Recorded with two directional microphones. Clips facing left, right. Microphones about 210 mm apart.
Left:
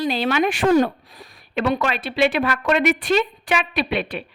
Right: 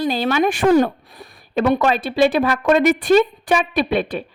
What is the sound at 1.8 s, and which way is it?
A woman's voice, 45° right (ahead or behind).